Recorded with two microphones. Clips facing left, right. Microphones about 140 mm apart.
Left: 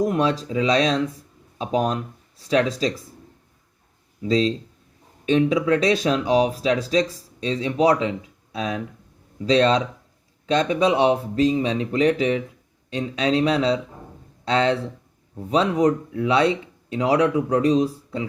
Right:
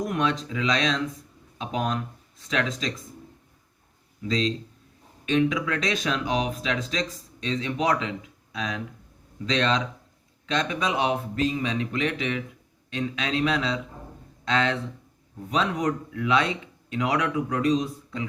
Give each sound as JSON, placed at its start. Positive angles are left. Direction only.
{"t": 0.0, "sound": "speech", "side_deg": 35}
{"t": 4.2, "sound": "speech", "side_deg": 35}